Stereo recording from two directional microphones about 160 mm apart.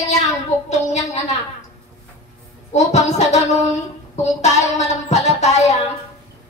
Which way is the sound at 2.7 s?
45° left (ahead or behind).